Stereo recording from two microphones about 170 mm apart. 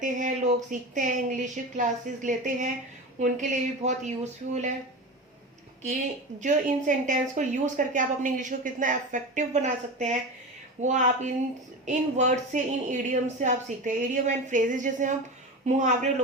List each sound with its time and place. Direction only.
0.0 s a woman's voice: 50° right (ahead or behind)
6.4 s a woman's voice: 50° right (ahead or behind)